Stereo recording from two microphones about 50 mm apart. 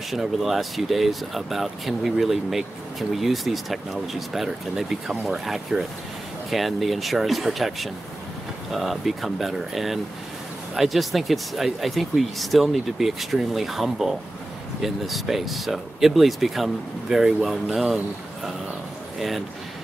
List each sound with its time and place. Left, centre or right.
0.1 s speech: centre